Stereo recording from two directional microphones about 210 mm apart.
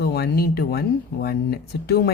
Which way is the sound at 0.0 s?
50° left (ahead or behind).